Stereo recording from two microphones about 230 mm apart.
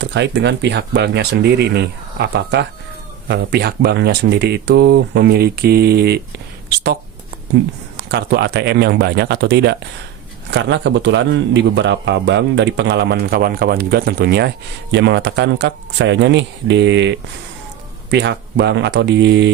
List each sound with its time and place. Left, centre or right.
0.0 s a man's voice: right
8.1 s a man's voice: right